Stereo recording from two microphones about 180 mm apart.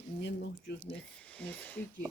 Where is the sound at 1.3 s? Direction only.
10° left (ahead or behind).